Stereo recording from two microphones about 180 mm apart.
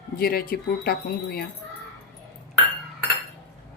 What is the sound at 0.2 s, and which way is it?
Speech, 55° left (ahead or behind).